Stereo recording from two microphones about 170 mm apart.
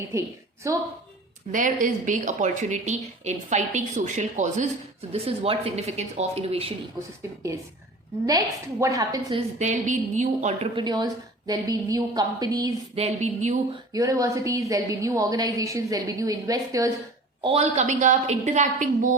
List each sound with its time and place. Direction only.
0.1 s a woman's voice: 15° right (ahead or behind)
1.5 s a woman's voice: 50° right (ahead or behind)
8.8 s a woman's voice: 20° right (ahead or behind)
9.6 s a woman's voice: 45° right (ahead or behind)
10.8 s a woman's voice: 25° right (ahead or behind)
13.0 s speech: 40° right (ahead or behind)
13.9 s a woman's voice: 20° right (ahead or behind)
17.4 s a woman's voice: 35° right (ahead or behind)